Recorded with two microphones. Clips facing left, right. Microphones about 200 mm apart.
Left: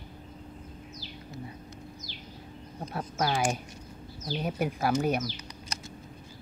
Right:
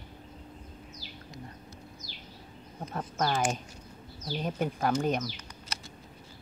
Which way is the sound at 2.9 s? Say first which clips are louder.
Left 1 dB; 10° left (ahead or behind).